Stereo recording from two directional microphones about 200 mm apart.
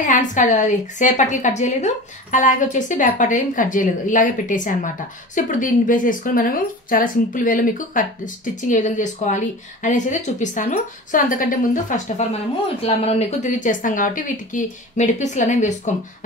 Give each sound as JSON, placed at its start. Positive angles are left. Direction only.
{"t": 0.0, "sound": "a woman's voice", "side_deg": 40}